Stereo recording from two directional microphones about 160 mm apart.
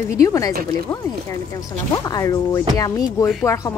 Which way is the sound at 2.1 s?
20° left (ahead or behind).